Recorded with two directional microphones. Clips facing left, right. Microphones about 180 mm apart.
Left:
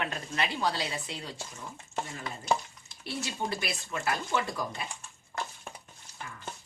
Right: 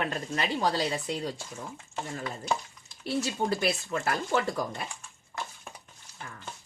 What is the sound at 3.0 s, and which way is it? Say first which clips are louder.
Speech: right 6 dB; 40° right (ahead or behind).